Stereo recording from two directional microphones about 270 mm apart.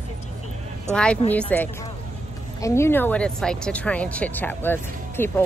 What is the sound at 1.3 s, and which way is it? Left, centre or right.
Speech, centre.